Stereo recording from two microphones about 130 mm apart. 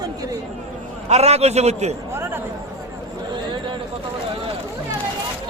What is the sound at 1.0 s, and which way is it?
Speech, 55° right (ahead or behind).